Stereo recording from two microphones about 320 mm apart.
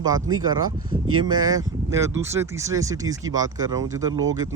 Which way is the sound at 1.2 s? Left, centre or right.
Centre.